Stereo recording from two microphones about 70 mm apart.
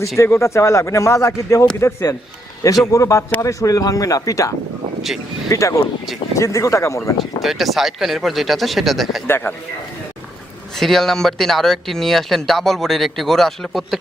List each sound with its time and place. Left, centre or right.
0.2 s speech: left
3.4 s speech: left
7.4 s speech: centre
9.2 s a man's voice: left
10.8 s speech: centre